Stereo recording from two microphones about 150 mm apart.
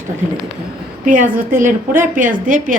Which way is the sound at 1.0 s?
60° right (ahead or behind).